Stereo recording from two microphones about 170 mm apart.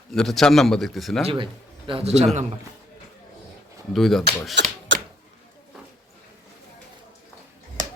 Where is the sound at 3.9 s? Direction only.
Centre (ahead or behind).